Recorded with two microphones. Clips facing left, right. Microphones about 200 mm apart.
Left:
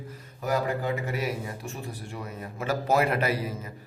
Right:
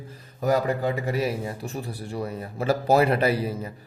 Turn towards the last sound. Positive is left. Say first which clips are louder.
# right 5 dB
turn(degrees=-30)  # may be behind; listen again after turning